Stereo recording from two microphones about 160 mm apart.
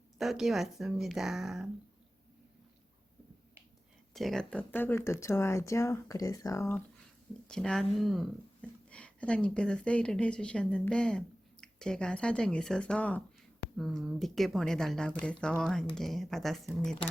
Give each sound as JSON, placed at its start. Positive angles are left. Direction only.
{"t": 0.2, "sound": "speech", "side_deg": 0}
{"t": 4.1, "sound": "speech", "side_deg": 0}
{"t": 7.4, "sound": "speech", "side_deg": 5}